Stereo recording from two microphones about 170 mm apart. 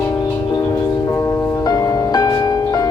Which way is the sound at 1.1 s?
15° left (ahead or behind).